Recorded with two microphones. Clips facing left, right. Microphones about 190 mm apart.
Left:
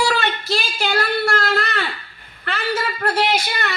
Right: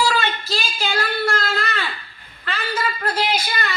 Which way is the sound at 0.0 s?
65° left (ahead or behind).